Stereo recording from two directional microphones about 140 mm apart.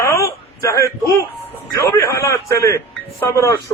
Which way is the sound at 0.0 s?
20° left (ahead or behind).